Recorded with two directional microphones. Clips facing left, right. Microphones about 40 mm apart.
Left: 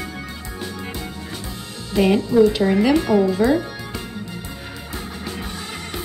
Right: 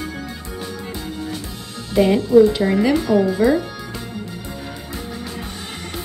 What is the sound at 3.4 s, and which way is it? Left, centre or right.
Speech, centre.